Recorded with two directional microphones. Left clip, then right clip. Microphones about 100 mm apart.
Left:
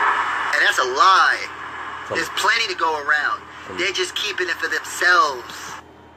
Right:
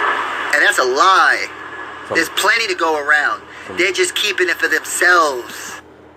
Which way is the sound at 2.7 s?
60° left (ahead or behind).